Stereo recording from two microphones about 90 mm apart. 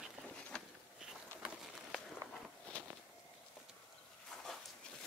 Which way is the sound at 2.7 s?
15° left (ahead or behind).